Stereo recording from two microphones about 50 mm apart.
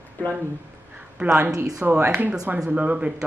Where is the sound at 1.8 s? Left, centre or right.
Right.